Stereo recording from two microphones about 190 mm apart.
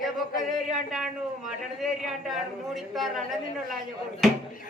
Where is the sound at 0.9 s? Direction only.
Centre (ahead or behind).